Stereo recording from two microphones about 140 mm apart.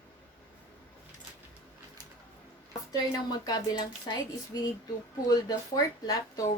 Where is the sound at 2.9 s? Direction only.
25° left (ahead or behind).